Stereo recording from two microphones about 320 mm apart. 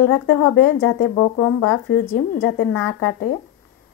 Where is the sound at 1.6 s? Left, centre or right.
Left.